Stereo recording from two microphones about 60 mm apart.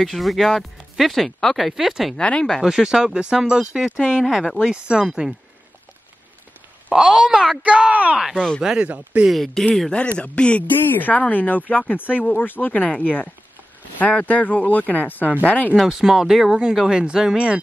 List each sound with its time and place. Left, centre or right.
0.0 s speech: centre
2.1 s speech: centre
2.6 s speech: centre
4.6 s speech: centre
6.9 s speech: centre
7.6 s speech: right
9.3 s speech: centre
9.9 s speech: left
10.9 s speech: left
15.7 s speech: centre